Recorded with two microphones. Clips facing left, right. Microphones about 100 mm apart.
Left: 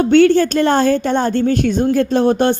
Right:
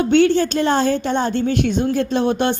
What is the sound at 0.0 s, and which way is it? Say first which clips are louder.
A woman's voice: left 4 dB; 50° left (ahead or behind).